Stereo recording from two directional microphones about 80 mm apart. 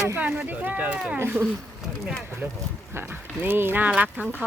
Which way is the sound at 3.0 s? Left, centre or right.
Right.